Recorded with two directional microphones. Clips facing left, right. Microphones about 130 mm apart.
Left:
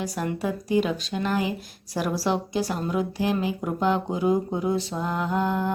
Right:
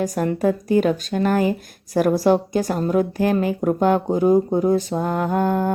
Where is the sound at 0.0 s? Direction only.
45° right (ahead or behind).